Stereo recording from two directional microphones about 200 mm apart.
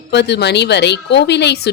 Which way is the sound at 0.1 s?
60° left (ahead or behind).